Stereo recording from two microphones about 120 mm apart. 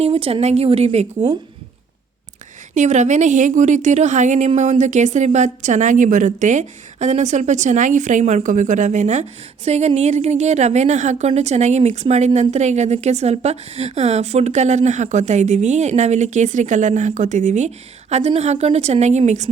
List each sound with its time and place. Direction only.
0.0 s a woman's voice: 55° right (ahead or behind)
2.7 s a woman's voice: 80° right
9.6 s a woman's voice: 65° right (ahead or behind); by 11.3 s 85° right
11.3 s a woman's voice: 65° right (ahead or behind)
18.1 s a woman's voice: 65° right (ahead or behind)